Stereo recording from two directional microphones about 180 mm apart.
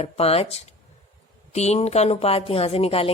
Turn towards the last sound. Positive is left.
turn(degrees=35)  # may be behind; listen again after turning